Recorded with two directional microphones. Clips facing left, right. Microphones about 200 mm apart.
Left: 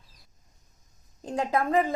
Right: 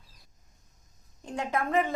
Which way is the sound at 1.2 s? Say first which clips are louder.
Left 4 dB; 35° left (ahead or behind).